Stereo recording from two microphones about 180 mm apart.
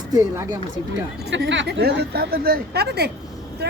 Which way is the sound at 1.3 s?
90° right.